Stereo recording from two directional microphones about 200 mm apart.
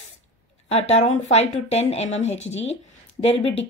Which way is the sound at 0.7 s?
35° left (ahead or behind).